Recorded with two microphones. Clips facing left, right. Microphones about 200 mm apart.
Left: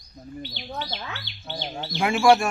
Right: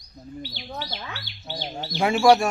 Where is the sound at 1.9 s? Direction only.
40° right (ahead or behind).